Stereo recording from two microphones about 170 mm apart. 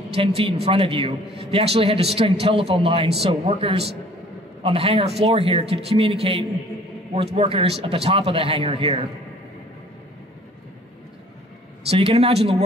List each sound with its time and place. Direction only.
0.1 s a man's voice: 35° right (ahead or behind)
11.9 s a man's voice: 35° right (ahead or behind)